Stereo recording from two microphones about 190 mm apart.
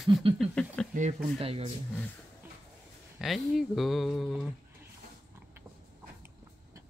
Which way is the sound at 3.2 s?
Centre (ahead or behind).